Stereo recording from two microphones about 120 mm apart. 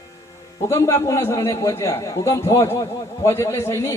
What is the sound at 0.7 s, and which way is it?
A man's voice, 25° left (ahead or behind).